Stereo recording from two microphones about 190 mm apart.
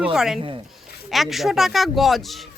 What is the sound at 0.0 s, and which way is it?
Speech, 5° right (ahead or behind).